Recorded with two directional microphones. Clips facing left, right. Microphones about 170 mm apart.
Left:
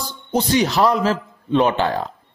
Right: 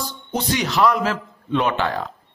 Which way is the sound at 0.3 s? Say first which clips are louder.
Left 5 dB; 30° left (ahead or behind).